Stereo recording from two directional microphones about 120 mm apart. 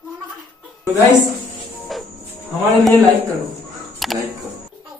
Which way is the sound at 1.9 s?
Centre (ahead or behind).